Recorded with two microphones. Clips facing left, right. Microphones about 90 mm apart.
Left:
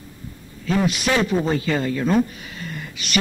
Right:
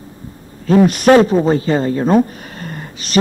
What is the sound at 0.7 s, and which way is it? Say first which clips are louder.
Speech: right 11 dB; 45° right (ahead or behind).